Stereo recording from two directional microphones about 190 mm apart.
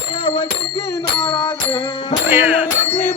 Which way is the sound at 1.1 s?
25° left (ahead or behind).